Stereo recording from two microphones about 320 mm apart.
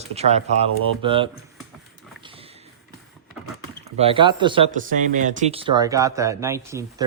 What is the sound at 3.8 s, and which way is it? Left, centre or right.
Speech, centre.